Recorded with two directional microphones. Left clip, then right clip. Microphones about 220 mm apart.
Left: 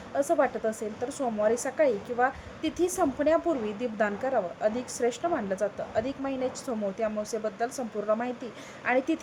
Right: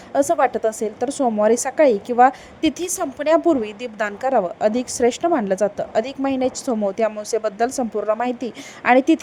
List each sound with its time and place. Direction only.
0.1 s a woman's voice: 35° right (ahead or behind)